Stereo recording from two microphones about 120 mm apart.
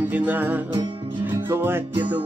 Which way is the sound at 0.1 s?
15° right (ahead or behind).